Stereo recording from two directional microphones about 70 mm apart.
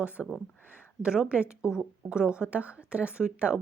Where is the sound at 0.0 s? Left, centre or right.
Centre.